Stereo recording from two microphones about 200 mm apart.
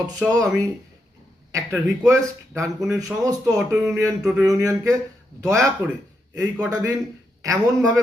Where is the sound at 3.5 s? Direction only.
Centre (ahead or behind).